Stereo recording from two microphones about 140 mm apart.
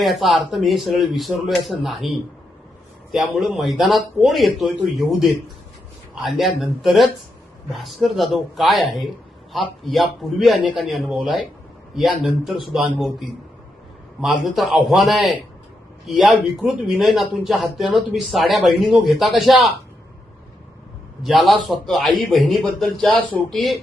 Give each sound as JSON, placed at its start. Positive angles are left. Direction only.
{"t": 0.0, "sound": "speech", "side_deg": 0}
{"t": 21.2, "sound": "speech", "side_deg": 0}